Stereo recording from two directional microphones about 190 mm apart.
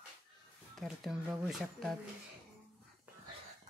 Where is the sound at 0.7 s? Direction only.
Centre (ahead or behind).